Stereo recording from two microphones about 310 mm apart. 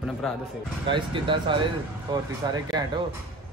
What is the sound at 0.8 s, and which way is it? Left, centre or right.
A man's voice, centre.